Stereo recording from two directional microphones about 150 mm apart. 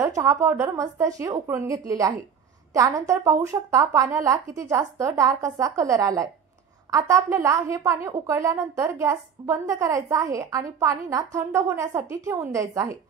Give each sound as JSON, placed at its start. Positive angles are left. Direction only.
{"t": 0.0, "sound": "a woman's voice", "side_deg": -20}